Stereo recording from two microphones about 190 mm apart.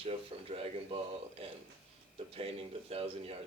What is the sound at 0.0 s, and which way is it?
Speech, 30° right (ahead or behind).